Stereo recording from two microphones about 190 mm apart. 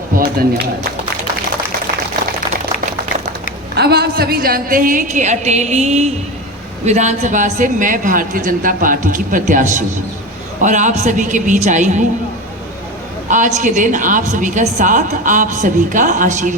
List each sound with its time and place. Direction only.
3.8 s a woman's voice: 60° right (ahead or behind); by 12.0 s 40° right (ahead or behind)
13.3 s a woman's voice: 45° right (ahead or behind)